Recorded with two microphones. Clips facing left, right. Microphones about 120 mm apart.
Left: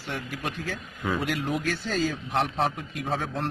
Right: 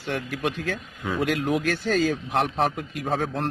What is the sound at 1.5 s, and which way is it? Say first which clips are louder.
Speech: right 5 dB; 70° right (ahead or behind).